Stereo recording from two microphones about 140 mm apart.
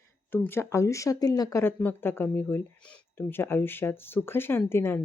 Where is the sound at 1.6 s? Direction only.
15° left (ahead or behind).